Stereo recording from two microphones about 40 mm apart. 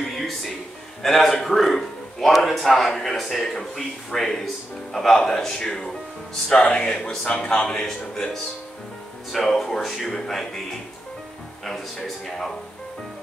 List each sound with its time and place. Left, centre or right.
0.0 s music: centre
1.0 s a man's voice: centre
8.1 s a man's voice: centre
10.2 s speech: centre
11.6 s speech: centre